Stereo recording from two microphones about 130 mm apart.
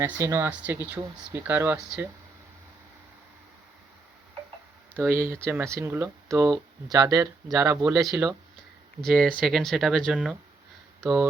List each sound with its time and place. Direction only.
0.0 s speech: 20° right (ahead or behind)
4.9 s speech: 15° right (ahead or behind)
7.9 s speech: centre (ahead or behind)